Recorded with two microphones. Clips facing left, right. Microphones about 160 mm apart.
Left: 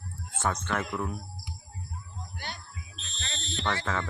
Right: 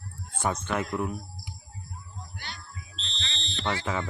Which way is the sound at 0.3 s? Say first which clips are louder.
Right 1 dB; 15° right (ahead or behind).